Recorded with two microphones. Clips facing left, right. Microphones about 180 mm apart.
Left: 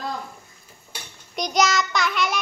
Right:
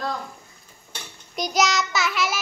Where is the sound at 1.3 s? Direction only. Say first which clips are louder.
Left 1 dB; centre (ahead or behind).